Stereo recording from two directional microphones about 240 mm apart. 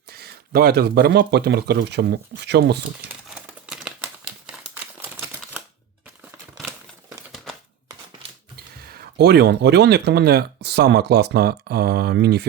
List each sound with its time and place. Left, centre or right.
0.1 s speech: right
3.2 s crumpling: centre
8.9 s speech: right